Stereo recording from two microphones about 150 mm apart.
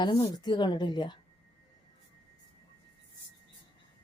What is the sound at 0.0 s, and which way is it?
A woman's voice, 30° left (ahead or behind).